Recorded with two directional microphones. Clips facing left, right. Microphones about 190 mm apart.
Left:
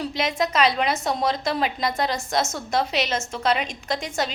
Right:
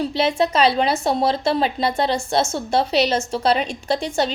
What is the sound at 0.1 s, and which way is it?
A woman's voice, 30° right (ahead or behind).